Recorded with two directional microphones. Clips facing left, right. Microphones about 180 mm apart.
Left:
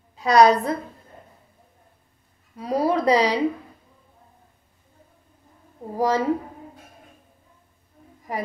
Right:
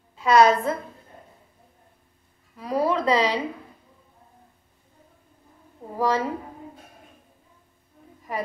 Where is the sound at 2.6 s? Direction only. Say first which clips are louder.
Left 2 dB; 40° left (ahead or behind).